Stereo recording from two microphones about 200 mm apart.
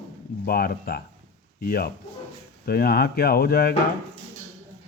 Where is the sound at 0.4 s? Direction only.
50° left (ahead or behind).